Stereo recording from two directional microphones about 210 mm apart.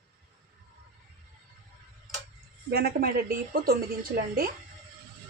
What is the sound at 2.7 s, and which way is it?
Speech, 45° right (ahead or behind).